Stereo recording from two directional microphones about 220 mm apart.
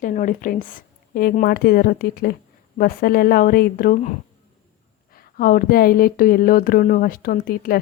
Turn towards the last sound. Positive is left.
turn(degrees=40)  # may be behind; listen again after turning